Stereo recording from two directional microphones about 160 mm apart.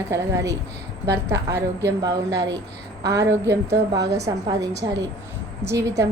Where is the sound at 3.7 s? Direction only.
90° right.